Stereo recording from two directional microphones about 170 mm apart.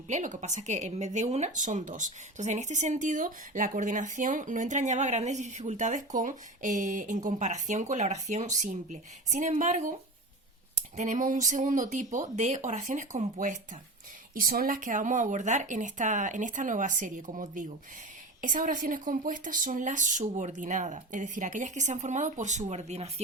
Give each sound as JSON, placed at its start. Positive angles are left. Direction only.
{"t": 0.1, "sound": "speech", "side_deg": -45}
{"t": 10.9, "sound": "speech", "side_deg": -45}